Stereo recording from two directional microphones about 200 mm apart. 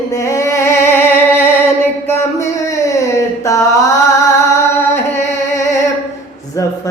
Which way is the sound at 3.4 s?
15° left (ahead or behind).